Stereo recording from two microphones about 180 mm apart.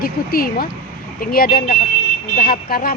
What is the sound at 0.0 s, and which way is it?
Speech, 55° left (ahead or behind).